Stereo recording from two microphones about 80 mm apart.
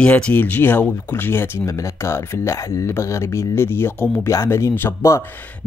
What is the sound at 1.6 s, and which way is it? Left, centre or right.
Speech, left.